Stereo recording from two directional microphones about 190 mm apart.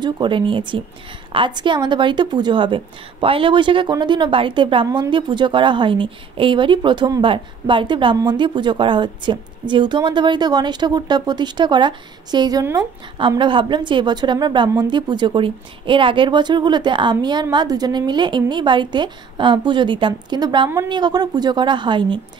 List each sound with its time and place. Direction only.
0.0 s a woman's voice: 25° right (ahead or behind)